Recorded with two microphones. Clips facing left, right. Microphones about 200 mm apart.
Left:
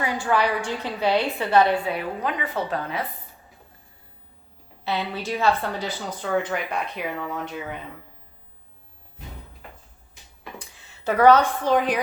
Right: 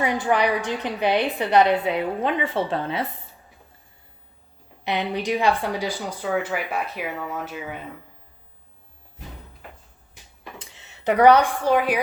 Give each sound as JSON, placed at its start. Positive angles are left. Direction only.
{"t": 0.0, "sound": "a woman's voice", "side_deg": -20}
{"t": 4.8, "sound": "a woman's voice", "side_deg": -15}
{"t": 10.6, "sound": "speech", "side_deg": -20}